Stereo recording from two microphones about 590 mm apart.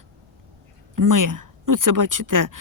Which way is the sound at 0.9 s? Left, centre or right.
Right.